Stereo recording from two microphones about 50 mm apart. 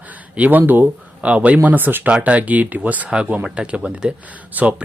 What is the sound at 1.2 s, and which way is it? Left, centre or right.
Speech, right.